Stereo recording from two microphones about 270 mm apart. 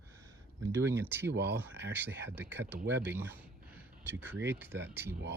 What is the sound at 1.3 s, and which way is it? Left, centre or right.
Speech, right.